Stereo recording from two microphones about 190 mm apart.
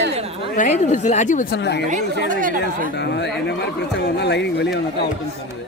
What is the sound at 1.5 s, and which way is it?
Speech, 65° left (ahead or behind).